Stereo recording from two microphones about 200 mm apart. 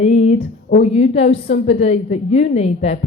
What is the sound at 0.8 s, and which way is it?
A woman's voice, 30° left (ahead or behind).